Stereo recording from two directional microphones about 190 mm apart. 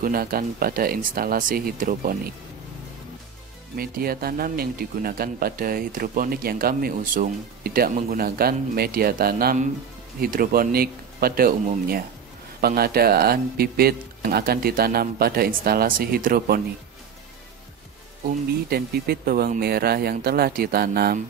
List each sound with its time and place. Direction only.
0.0 s speech: 50° right (ahead or behind)
3.7 s speech: 50° right (ahead or behind)
18.7 s speech: 55° right (ahead or behind)